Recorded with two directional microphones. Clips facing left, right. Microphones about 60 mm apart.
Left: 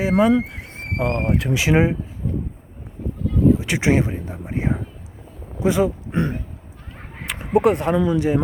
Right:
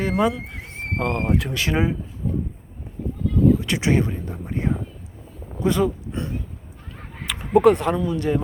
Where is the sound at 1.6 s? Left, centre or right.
Left.